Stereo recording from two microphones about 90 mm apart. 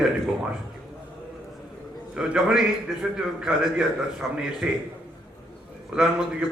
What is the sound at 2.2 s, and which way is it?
A man's voice, 5° right (ahead or behind).